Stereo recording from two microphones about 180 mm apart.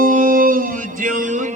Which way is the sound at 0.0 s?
50° right (ahead or behind).